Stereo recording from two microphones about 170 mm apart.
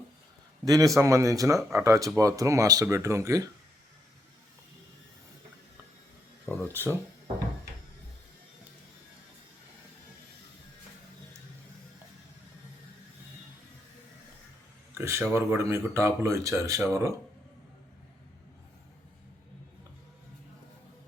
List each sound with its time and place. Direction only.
0.6 s a man's voice: 20° right (ahead or behind)
6.7 s speech: 15° right (ahead or behind)
14.9 s speech: 15° right (ahead or behind)